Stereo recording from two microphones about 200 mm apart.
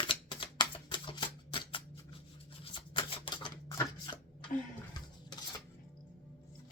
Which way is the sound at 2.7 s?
25° left (ahead or behind).